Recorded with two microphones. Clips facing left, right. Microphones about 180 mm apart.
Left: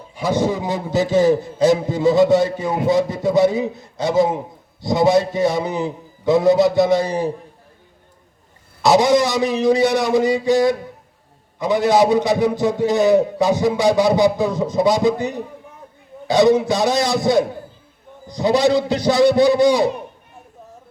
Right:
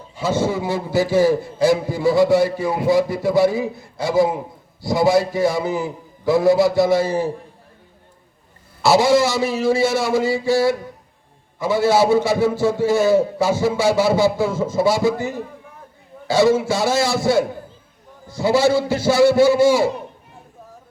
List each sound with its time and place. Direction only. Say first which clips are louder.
0.2 s a man's voice: left 1 dB; 15° left (ahead or behind)
8.8 s a man's voice: left 1 dB; 20° left (ahead or behind)